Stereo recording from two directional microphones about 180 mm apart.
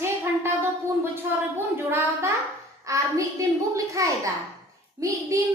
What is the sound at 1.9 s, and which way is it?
A woman's voice, 15° right (ahead or behind).